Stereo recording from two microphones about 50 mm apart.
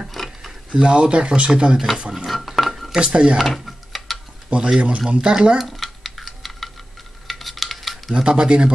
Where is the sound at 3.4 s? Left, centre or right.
Centre.